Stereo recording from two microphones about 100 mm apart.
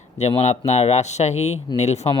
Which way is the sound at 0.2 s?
90° left.